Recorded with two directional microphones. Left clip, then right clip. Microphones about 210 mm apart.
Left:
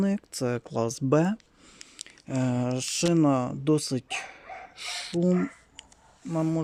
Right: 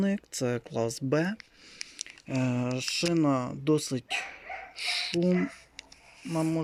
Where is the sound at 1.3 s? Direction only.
Centre (ahead or behind).